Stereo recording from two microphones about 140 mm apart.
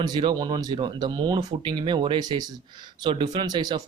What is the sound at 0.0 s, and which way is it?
Speech, 35° right (ahead or behind).